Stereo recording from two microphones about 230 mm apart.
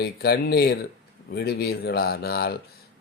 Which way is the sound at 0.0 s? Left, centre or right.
Left.